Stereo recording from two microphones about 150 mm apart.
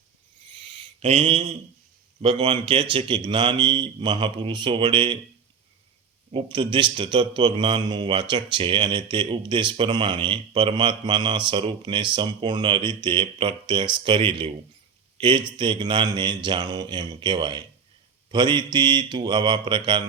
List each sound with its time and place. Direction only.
0.7 s mantra: 40° right (ahead or behind)
2.2 s speech: 35° right (ahead or behind)
6.3 s speech: 35° right (ahead or behind)